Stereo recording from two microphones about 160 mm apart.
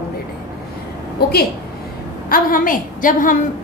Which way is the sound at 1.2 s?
80° left.